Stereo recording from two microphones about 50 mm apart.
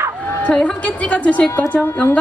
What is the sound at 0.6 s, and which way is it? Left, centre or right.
Speech, left.